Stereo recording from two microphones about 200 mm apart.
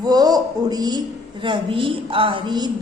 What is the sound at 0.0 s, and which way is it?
A woman's voice, 20° right (ahead or behind).